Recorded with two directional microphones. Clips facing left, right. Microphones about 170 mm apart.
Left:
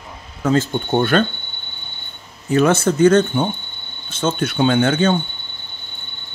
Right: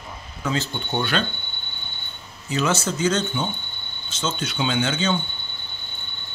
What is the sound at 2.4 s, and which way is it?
Speech, 55° left (ahead or behind).